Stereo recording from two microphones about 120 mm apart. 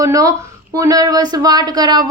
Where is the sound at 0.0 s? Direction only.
30° right (ahead or behind).